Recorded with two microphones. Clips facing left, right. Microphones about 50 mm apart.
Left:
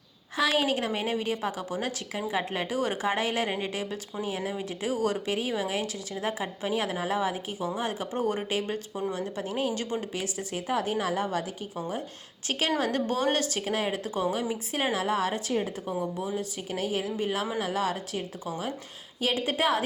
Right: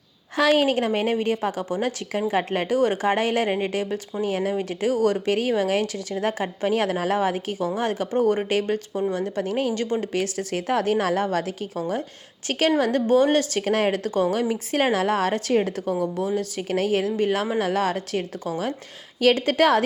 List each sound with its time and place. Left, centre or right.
0.3 s a woman's voice: right
10.2 s speech: right
12.5 s speech: right
17.2 s speech: right